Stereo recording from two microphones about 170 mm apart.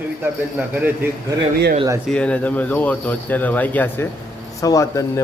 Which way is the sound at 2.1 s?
5° left (ahead or behind).